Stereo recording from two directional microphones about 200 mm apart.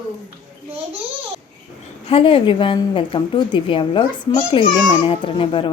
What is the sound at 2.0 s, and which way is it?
Speech, 25° left (ahead or behind).